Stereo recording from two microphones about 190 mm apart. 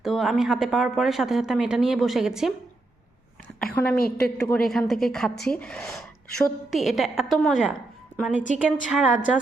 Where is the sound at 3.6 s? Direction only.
5° left (ahead or behind).